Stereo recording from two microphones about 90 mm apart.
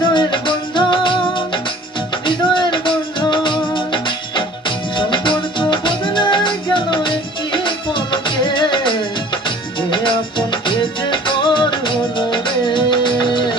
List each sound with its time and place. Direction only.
0.0 s music: 60° left (ahead or behind)